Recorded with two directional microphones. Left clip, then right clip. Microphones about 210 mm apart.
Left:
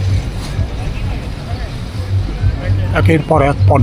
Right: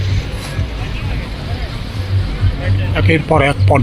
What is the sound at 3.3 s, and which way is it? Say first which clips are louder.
Speech: right 1 dB; 5° left (ahead or behind).